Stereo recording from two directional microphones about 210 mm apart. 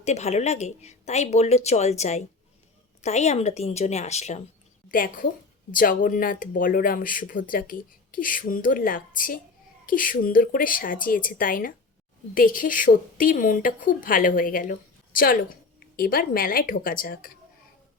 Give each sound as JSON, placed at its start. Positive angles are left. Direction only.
{"t": 0.0, "sound": "a woman's voice", "side_deg": 30}